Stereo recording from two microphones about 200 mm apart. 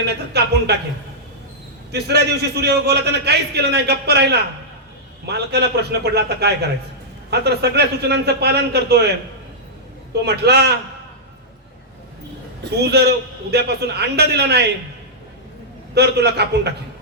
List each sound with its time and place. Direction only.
0.0 s a man's voice: 55° right (ahead or behind)
1.9 s a man's voice: 55° right (ahead or behind)
10.2 s a man's voice: 55° right (ahead or behind)
12.6 s a man's voice: 55° right (ahead or behind)
16.0 s a man's voice: 55° right (ahead or behind)